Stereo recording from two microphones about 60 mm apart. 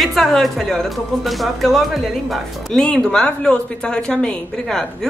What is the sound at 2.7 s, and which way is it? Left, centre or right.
A woman's voice, centre.